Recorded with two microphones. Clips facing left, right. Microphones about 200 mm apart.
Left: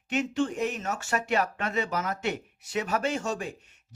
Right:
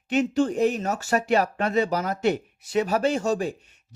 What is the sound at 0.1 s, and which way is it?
Speech, 35° right (ahead or behind).